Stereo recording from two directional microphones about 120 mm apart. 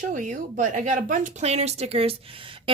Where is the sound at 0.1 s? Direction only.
90° right.